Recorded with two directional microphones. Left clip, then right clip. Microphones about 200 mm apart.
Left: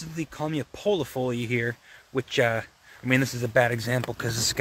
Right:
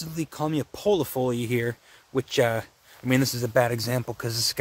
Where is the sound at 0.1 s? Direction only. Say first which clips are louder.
Right 2 dB; 20° right (ahead or behind).